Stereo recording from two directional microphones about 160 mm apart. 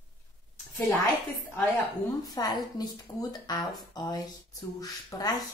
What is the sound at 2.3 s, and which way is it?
A woman's voice, 25° left (ahead or behind).